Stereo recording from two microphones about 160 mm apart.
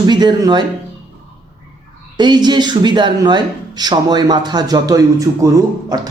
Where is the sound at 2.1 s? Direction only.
25° right (ahead or behind).